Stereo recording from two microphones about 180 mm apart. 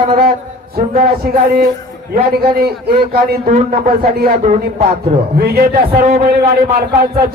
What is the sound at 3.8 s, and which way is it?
Speech, 50° right (ahead or behind).